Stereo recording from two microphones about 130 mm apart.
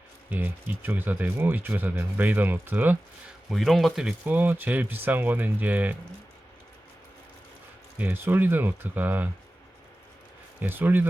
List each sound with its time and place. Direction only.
0.3 s speech: 15° right (ahead or behind)
3.5 s speech: centre (ahead or behind)
4.4 s speech: 15° right (ahead or behind)
7.9 s speech: 20° right (ahead or behind)
10.6 s speech: 15° right (ahead or behind)